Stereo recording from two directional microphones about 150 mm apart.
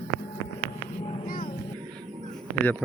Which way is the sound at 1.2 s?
75° left (ahead or behind).